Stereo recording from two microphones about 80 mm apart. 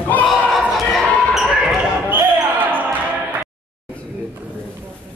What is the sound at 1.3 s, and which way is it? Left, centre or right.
Basketball bounce, centre.